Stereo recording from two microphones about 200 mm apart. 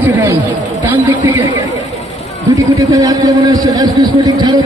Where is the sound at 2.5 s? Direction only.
15° right (ahead or behind).